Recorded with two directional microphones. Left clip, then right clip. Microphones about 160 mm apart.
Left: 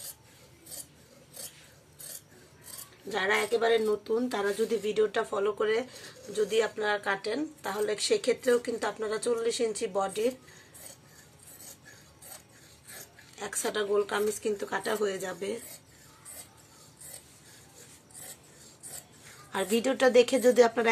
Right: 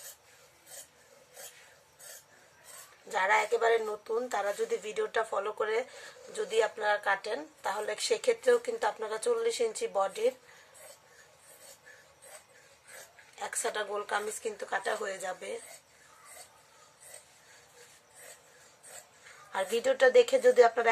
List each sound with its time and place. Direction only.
3.1 s speech: 10° right (ahead or behind)
4.9 s speech: 15° right (ahead or behind); by 10.3 s 35° right (ahead or behind)
13.4 s speech: 30° right (ahead or behind)
19.5 s a woman's voice: 5° right (ahead or behind)